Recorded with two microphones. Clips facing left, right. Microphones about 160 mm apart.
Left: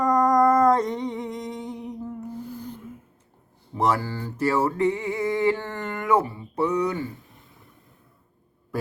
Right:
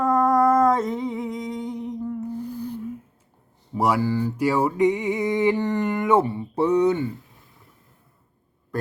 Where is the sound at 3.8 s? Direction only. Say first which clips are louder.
Right 3 dB; 10° right (ahead or behind).